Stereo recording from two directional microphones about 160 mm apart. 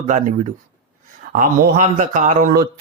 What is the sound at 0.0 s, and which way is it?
Speech, 55° right (ahead or behind).